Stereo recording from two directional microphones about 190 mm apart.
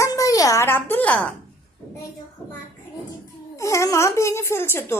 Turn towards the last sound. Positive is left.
turn(degrees=10)  # may be behind; listen again after turning